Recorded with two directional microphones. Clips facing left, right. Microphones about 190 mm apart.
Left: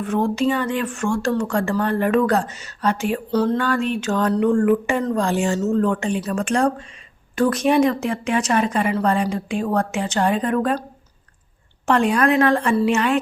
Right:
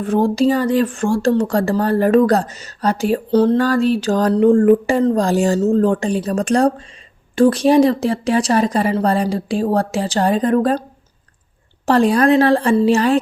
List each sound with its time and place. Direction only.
0.0 s speech: 35° right (ahead or behind)
11.9 s speech: 35° right (ahead or behind)